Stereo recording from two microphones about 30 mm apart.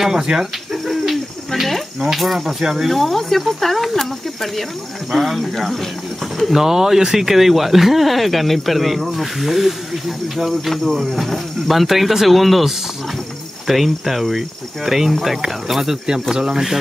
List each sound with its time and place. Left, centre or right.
0.0 s speech: centre
0.8 s bird: centre
2.1 s speech: centre
2.4 s speech: centre
2.9 s speech: centre
5.1 s speech: centre
13.7 s speech: centre